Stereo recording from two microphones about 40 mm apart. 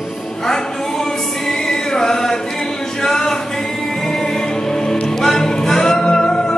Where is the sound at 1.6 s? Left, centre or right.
Centre.